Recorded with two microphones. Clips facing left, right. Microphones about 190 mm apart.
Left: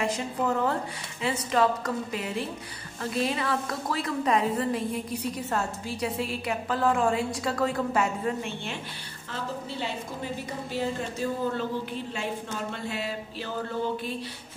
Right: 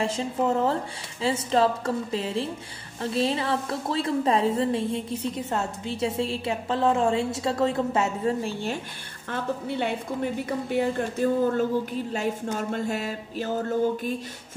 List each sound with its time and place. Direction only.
0.0 s a woman's voice: 30° right (ahead or behind)
9.3 s a woman's voice: 60° right (ahead or behind)
12.5 s a sound: 45° right (ahead or behind)